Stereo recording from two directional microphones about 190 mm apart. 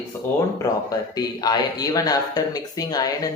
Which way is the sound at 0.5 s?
20° left (ahead or behind).